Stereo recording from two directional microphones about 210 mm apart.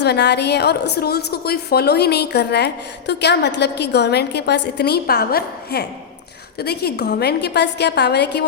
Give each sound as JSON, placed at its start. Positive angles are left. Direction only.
{"t": 0.0, "sound": "a woman's voice", "side_deg": 55}